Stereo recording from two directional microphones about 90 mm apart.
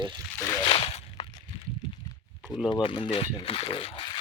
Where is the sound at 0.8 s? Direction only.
75° left (ahead or behind).